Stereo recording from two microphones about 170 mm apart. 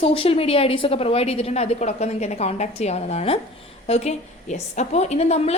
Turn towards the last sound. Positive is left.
turn(degrees=40)  # may be behind; listen again after turning